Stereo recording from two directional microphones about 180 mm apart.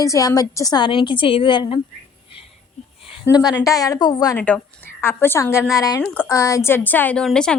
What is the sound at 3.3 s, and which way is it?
A woman's voice, 20° left (ahead or behind).